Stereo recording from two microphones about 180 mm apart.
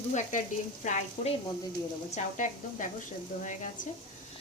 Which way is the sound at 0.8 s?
40° left (ahead or behind).